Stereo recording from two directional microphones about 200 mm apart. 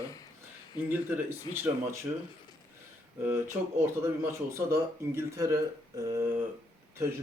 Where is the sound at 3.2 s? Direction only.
15° right (ahead or behind).